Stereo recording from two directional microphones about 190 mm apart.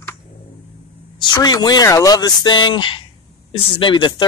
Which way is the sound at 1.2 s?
20° left (ahead or behind).